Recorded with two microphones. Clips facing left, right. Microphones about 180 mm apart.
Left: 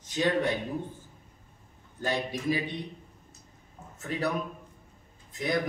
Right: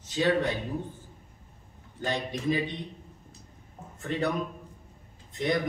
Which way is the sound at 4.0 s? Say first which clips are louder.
Right 2 dB; 5° left (ahead or behind).